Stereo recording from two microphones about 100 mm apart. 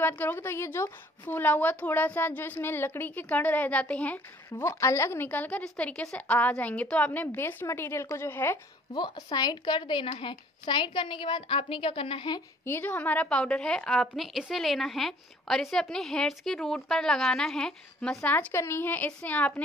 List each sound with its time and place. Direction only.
0.0 s a woman's voice: 20° left (ahead or behind)
4.5 s a woman's voice: 30° left (ahead or behind)
8.9 s a woman's voice: 45° left (ahead or behind)
12.6 s a woman's voice: 20° left (ahead or behind)
18.5 s a woman's voice: 25° left (ahead or behind)